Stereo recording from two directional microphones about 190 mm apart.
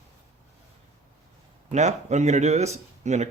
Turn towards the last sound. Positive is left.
turn(degrees=-35)  # may be behind; listen again after turning